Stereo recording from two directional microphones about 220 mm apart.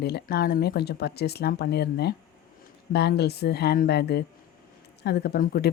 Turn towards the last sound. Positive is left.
turn(degrees=45)  # may be behind; listen again after turning